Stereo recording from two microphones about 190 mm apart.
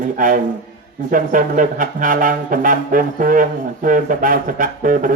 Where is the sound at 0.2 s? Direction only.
45° right (ahead or behind).